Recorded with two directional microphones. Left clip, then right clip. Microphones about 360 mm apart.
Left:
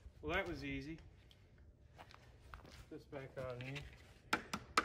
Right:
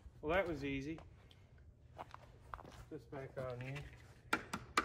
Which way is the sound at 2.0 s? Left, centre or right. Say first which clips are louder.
Right 7 dB; centre.